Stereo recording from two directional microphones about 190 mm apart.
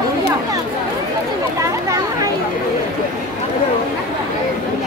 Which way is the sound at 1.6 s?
15° right (ahead or behind).